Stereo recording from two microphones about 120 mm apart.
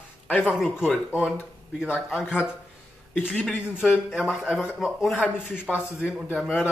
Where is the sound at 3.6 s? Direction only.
10° right (ahead or behind).